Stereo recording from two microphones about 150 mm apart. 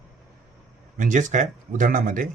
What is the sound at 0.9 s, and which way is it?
Speech, 55° right (ahead or behind).